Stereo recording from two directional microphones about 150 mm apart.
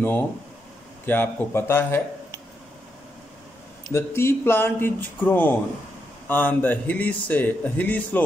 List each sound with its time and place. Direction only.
0.0 s speech: 15° left (ahead or behind)
3.9 s speech: 15° left (ahead or behind)